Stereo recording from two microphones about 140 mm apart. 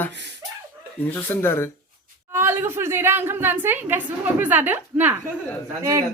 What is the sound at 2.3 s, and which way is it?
A woman's voice, 15° right (ahead or behind).